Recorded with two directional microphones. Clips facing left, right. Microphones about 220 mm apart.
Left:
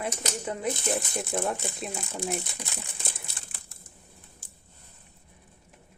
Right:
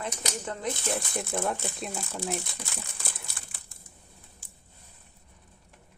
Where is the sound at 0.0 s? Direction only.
10° left (ahead or behind).